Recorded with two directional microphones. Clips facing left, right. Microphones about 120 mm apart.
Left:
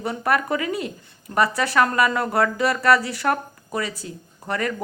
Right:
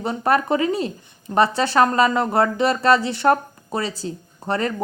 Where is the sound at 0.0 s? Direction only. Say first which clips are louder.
Right 3 dB; 25° right (ahead or behind).